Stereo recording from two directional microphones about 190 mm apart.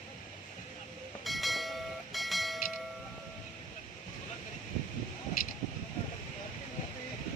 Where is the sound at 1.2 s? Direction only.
Centre (ahead or behind).